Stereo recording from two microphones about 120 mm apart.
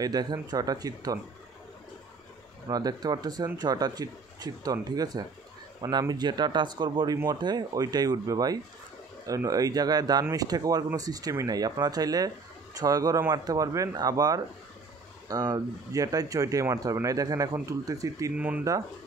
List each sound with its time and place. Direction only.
0.0 s speech: 35° right (ahead or behind)
2.7 s speech: 35° right (ahead or behind)
18.3 s speech: 10° right (ahead or behind)